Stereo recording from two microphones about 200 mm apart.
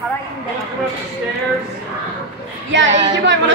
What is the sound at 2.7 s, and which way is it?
Speech, 65° right (ahead or behind).